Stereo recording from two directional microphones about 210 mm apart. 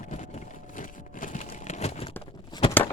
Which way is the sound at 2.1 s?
20° left (ahead or behind).